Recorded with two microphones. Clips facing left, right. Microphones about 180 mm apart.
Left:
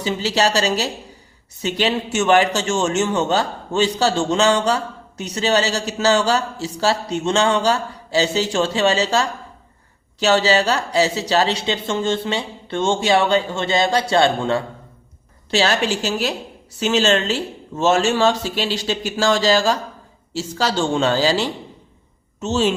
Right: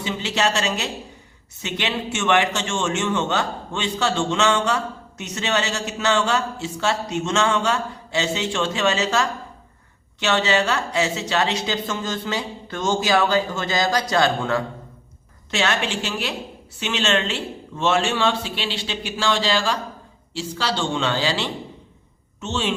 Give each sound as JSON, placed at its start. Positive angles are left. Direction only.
{"t": 0.0, "sound": "a man's voice", "side_deg": 35}